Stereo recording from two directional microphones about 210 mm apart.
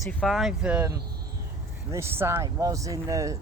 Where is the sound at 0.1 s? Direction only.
5° left (ahead or behind).